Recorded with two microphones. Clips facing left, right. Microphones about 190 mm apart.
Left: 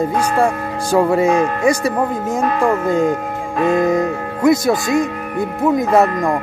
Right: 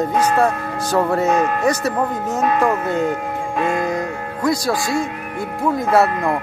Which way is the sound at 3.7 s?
20° left (ahead or behind).